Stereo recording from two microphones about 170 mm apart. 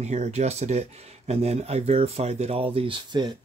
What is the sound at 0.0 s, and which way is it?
Speech, 40° right (ahead or behind).